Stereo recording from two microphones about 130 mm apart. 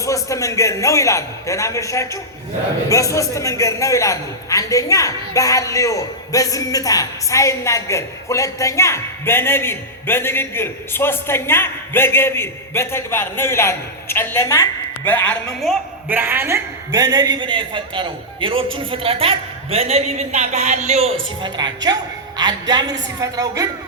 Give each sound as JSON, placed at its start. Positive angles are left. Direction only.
{"t": 0.0, "sound": "a man's voice", "side_deg": 25}
{"t": 16.0, "sound": "a man's voice", "side_deg": -15}
{"t": 21.4, "sound": "a woman's voice", "side_deg": -30}